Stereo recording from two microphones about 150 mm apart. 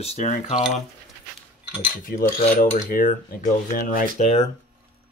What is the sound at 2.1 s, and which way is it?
Cutlery, 65° left (ahead or behind).